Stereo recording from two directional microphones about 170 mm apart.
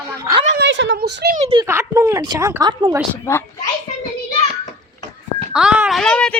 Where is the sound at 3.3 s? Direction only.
15° left (ahead or behind).